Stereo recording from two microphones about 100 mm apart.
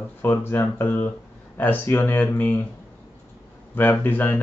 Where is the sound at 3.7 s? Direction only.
20° left (ahead or behind).